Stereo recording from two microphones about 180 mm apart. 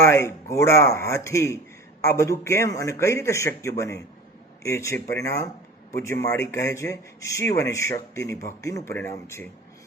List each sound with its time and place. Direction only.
0.0 s a man's voice: 15° left (ahead or behind)